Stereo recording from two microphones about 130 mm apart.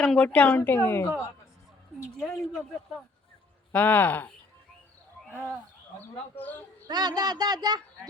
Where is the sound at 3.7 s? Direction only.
15° left (ahead or behind).